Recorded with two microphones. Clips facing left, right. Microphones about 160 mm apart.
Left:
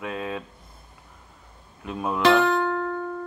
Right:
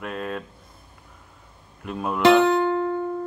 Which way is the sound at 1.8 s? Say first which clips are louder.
Even; centre (ahead or behind).